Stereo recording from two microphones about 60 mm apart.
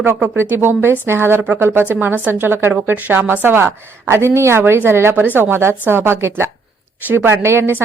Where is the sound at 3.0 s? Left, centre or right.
Right.